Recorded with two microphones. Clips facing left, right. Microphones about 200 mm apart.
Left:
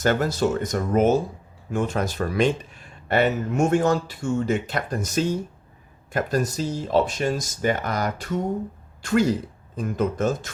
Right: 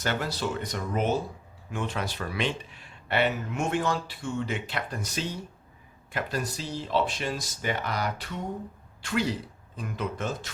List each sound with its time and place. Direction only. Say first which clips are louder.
0.0 s speech: left 8 dB; 45° left (ahead or behind)